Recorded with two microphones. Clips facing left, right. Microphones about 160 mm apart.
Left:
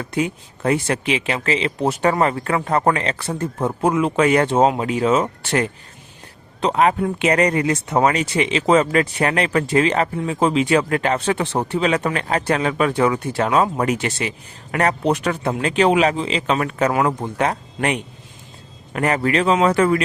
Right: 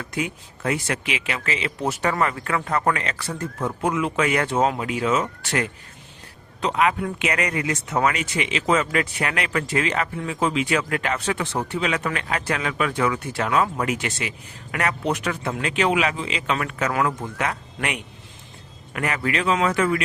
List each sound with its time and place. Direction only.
0.0 s speech: 30° left (ahead or behind)